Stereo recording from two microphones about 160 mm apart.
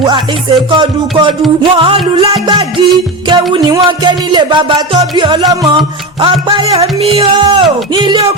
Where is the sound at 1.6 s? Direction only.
30° right (ahead or behind).